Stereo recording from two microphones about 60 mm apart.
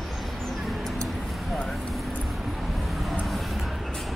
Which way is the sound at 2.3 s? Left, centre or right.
Centre.